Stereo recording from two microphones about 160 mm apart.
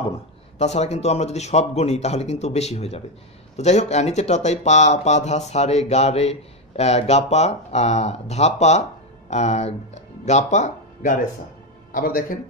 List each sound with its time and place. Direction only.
0.6 s speech: 45° left (ahead or behind)
11.9 s a man's voice: 65° left (ahead or behind)